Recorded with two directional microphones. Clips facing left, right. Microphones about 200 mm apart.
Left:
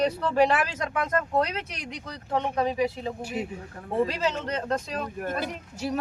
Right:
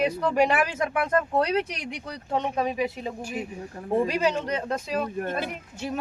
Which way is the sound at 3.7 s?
20° right (ahead or behind).